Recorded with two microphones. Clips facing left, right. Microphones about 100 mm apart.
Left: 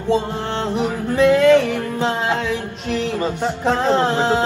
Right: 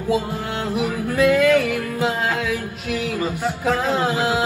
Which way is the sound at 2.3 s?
5° right (ahead or behind).